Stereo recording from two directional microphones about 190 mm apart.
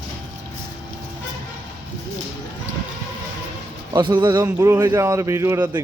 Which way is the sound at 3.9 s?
25° right (ahead or behind).